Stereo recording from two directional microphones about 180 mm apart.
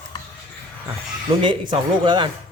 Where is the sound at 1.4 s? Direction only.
25° right (ahead or behind).